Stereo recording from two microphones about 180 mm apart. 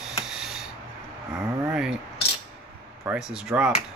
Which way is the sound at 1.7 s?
5° right (ahead or behind).